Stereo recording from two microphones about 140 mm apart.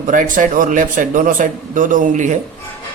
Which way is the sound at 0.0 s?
70° right (ahead or behind).